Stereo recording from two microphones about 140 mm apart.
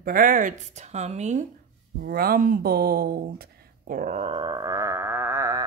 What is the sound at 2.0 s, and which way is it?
A woman's voice, 90° right.